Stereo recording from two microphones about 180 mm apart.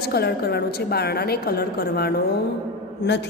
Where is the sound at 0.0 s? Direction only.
60° left (ahead or behind).